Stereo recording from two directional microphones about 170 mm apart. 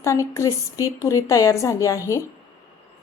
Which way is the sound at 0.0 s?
15° left (ahead or behind).